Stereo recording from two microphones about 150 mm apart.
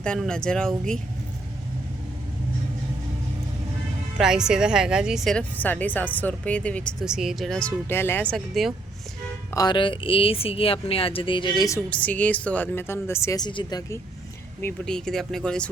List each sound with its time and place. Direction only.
0.0 s speech: 5° left (ahead or behind)
4.2 s speech: 5° right (ahead or behind)
7.0 s speech: 5° right (ahead or behind)
7.9 s speech: 15° left (ahead or behind)
9.6 s speech: 30° left (ahead or behind)
11.9 s speech: 10° left (ahead or behind); by 14.0 s 25° left (ahead or behind)
14.6 s speech: 5° left (ahead or behind)